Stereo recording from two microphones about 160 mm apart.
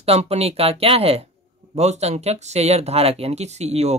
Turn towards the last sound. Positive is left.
turn(degrees=-45)  # may be behind; listen again after turning